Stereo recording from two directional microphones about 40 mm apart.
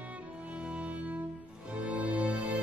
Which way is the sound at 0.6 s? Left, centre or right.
Right.